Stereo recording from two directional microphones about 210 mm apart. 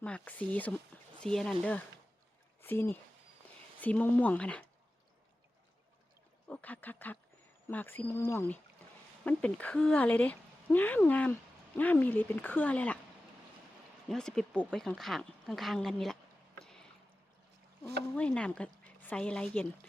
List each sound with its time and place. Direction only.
0.0 s speech: 5° left (ahead or behind)
6.5 s speech: 10° left (ahead or behind)
14.1 s speech: centre (ahead or behind)
18.1 s speech: 5° left (ahead or behind)